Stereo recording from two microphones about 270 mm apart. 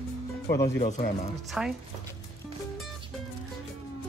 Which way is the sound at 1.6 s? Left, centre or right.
Centre.